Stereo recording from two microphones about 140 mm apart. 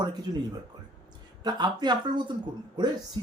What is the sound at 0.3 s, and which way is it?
Speech, 35° right (ahead or behind).